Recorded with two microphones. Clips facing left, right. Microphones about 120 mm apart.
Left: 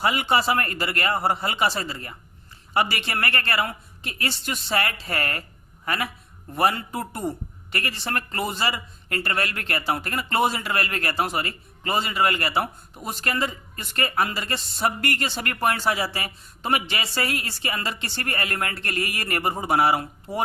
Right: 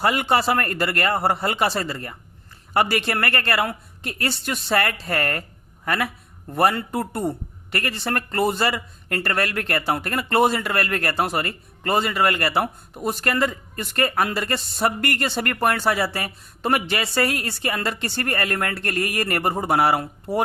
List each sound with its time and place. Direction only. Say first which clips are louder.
0.0 s a man's voice: right 2 dB; 55° right (ahead or behind)